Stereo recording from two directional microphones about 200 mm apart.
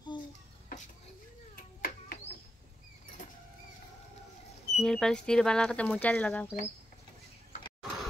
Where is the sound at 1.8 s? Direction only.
45° left (ahead or behind).